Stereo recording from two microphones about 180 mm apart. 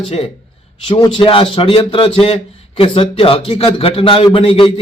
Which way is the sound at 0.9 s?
30° left (ahead or behind).